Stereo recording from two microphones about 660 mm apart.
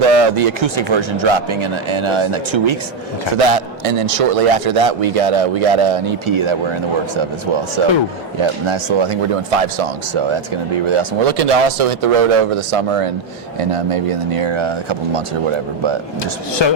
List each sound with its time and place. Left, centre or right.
0.1 s speech: right
7.8 s speech: right
16.6 s speech: left